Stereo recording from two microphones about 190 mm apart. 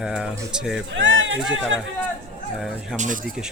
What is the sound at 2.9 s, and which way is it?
Speech, 40° right (ahead or behind).